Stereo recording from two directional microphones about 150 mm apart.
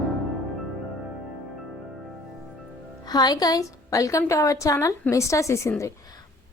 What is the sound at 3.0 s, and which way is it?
A woman's voice, 25° left (ahead or behind).